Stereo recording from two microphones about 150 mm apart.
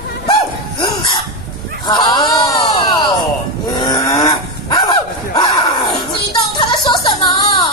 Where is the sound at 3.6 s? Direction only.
25° left (ahead or behind).